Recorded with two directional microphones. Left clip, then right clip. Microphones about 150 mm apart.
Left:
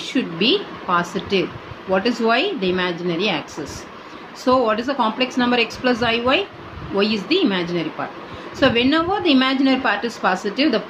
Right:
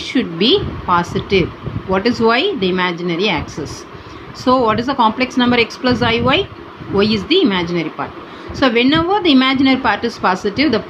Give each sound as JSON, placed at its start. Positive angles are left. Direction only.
{"t": 0.0, "sound": "a woman's voice", "side_deg": -45}